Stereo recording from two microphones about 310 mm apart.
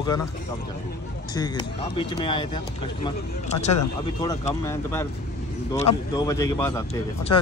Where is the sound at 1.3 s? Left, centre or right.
Centre.